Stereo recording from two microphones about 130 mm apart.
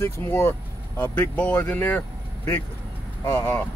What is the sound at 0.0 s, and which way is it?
Speech, 20° left (ahead or behind).